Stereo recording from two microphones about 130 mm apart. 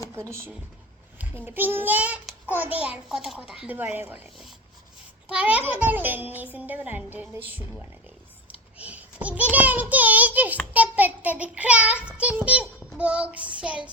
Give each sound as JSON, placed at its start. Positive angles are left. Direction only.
{"t": 0.2, "sound": "a child's voice", "side_deg": -20}
{"t": 5.3, "sound": "a child's voice", "side_deg": -10}
{"t": 8.8, "sound": "child singing", "side_deg": -10}
{"t": 10.8, "sound": "a child's voice", "side_deg": -10}